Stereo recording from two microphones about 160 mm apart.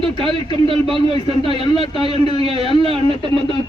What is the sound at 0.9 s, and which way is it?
Speech, 35° right (ahead or behind).